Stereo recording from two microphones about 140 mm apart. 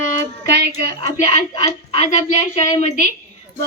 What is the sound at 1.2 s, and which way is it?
A woman's voice, 50° left (ahead or behind).